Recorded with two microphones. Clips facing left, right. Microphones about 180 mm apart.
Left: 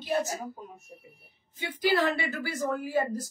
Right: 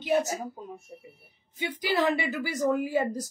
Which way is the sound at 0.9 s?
25° right (ahead or behind).